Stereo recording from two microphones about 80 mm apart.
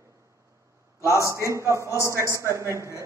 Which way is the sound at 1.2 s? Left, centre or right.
Right.